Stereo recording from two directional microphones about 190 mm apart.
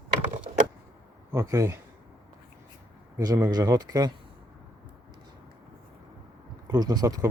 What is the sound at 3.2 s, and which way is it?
Speech, 20° right (ahead or behind).